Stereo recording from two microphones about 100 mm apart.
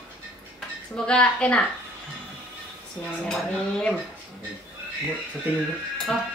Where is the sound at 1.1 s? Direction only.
10° left (ahead or behind).